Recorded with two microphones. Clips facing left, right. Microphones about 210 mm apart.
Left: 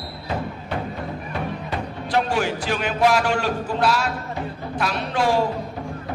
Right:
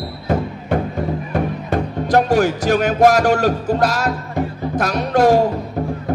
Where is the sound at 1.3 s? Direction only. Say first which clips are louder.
Right 7 dB; 45° right (ahead or behind).